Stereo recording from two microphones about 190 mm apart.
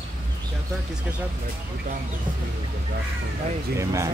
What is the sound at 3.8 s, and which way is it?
Speech, 15° right (ahead or behind).